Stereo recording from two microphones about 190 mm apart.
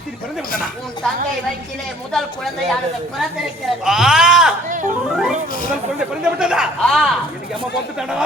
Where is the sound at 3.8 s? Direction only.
5° right (ahead or behind).